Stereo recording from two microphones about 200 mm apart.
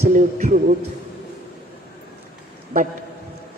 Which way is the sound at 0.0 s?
40° right (ahead or behind).